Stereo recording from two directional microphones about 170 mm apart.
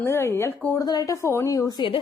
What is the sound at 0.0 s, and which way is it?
A woman's voice, 15° left (ahead or behind).